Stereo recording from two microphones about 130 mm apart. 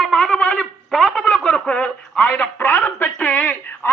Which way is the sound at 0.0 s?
5° left (ahead or behind).